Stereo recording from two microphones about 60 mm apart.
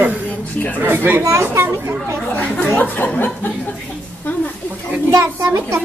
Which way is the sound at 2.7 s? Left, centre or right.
Left.